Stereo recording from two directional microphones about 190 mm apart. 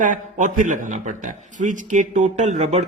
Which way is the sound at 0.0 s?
45° right (ahead or behind).